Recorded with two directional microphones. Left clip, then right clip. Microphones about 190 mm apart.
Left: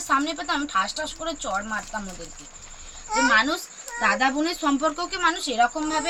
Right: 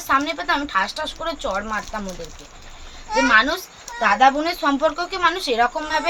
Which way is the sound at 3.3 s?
20° right (ahead or behind).